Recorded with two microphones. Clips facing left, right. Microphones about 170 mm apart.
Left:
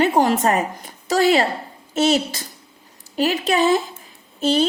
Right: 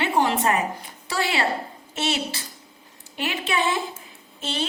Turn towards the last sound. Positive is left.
turn(degrees=40)  # may be behind; listen again after turning